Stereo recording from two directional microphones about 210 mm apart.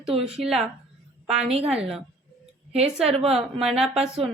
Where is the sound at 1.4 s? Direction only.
30° right (ahead or behind).